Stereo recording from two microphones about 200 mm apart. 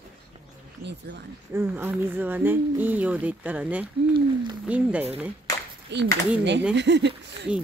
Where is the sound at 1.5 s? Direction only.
10° right (ahead or behind).